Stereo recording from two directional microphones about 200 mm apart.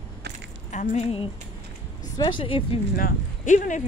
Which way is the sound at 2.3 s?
25° left (ahead or behind).